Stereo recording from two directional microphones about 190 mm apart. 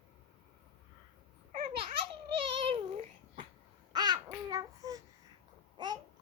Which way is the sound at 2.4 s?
30° right (ahead or behind).